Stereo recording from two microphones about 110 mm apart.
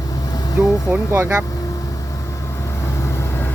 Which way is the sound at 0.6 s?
20° right (ahead or behind).